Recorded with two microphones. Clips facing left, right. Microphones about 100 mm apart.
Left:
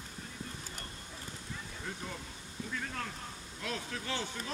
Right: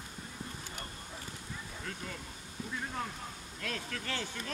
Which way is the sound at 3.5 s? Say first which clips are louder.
Left 1 dB; 20° left (ahead or behind).